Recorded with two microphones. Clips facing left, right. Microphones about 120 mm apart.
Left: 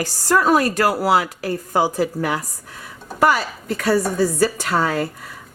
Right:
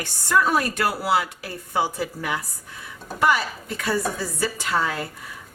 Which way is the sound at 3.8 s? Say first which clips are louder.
Left 7 dB; 75° left (ahead or behind).